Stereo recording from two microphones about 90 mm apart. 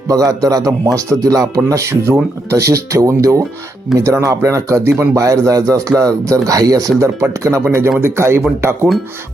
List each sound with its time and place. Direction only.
0.1 s speech: 40° right (ahead or behind)